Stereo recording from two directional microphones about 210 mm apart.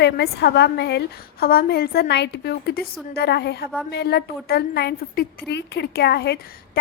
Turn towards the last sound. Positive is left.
turn(degrees=50)  # may be behind; listen again after turning